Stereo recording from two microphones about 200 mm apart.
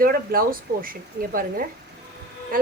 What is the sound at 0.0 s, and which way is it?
Speech, 45° right (ahead or behind).